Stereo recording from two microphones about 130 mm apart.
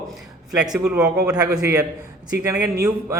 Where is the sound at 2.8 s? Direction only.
20° right (ahead or behind).